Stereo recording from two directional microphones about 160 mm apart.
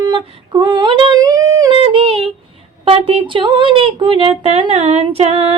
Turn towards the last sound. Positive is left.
turn(degrees=-40)  # may be behind; listen again after turning